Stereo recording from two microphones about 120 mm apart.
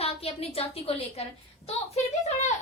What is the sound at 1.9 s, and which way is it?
Speech, 80° left.